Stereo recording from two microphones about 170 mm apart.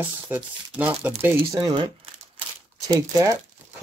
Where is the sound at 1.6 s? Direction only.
25° right (ahead or behind).